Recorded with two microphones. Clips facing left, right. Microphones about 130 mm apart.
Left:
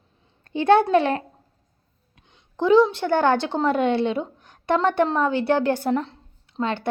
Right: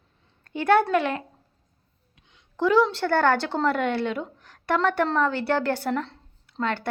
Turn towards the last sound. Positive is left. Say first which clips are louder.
# left 2 dB
turn(degrees=15)  # may be behind; listen again after turning